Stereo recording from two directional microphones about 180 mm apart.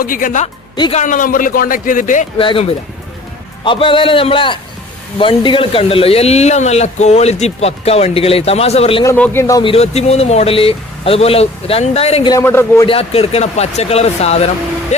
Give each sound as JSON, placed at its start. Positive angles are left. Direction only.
{"t": 0.0, "sound": "speech", "side_deg": 50}
{"t": 0.8, "sound": "speech", "side_deg": 30}
{"t": 1.0, "sound": "speech", "side_deg": 45}
{"t": 2.4, "sound": "a man's voice", "side_deg": 30}
{"t": 9.0, "sound": "speech", "side_deg": 10}
{"t": 12.3, "sound": "a man's voice", "side_deg": 15}
{"t": 12.8, "sound": "speech", "side_deg": 30}